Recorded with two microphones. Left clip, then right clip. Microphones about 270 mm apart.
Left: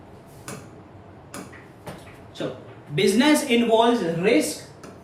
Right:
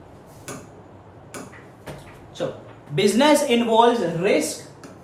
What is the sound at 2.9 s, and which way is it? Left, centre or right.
Speech, centre.